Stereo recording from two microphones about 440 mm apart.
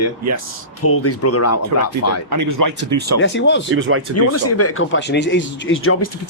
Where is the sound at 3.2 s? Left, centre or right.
Left.